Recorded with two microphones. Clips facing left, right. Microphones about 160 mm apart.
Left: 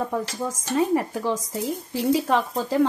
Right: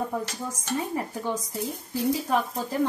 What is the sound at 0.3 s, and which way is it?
Speech, 90° left.